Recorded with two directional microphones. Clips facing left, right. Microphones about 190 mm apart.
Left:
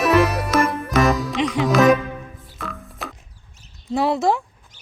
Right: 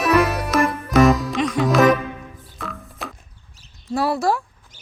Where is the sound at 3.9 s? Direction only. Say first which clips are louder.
Left 1 dB; 20° left (ahead or behind).